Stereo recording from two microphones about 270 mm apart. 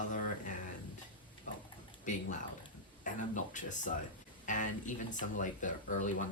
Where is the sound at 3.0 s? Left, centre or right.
Left.